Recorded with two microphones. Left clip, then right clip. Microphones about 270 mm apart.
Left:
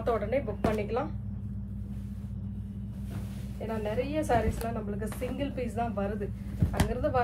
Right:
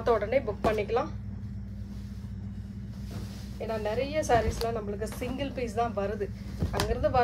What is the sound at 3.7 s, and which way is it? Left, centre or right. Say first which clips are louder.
A woman's voice: right 2 dB; right.